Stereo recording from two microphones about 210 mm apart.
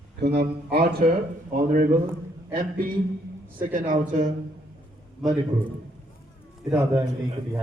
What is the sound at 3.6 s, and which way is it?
Speech, 40° right (ahead or behind).